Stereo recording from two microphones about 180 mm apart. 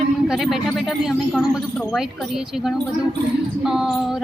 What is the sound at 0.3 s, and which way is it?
A woman's voice, centre (ahead or behind).